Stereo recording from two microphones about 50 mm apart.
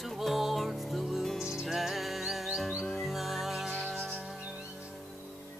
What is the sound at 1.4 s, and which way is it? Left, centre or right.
Music, centre.